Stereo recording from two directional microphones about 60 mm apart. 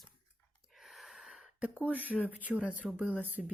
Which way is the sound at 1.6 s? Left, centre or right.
Right.